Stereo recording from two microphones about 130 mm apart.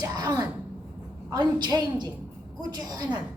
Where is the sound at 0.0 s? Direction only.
30° right (ahead or behind).